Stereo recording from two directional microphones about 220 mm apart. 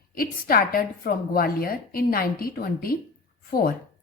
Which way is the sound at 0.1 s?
40° left (ahead or behind).